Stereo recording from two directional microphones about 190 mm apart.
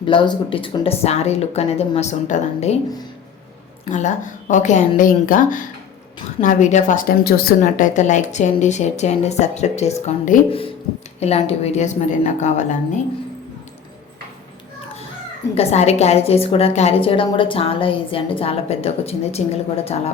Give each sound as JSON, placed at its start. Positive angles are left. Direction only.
{"t": 0.0, "sound": "speech", "side_deg": 25}
{"t": 3.8, "sound": "speech", "side_deg": 40}
{"t": 15.5, "sound": "speech", "side_deg": 35}